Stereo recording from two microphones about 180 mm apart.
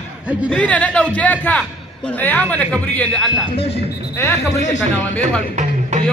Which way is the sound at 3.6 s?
35° left (ahead or behind).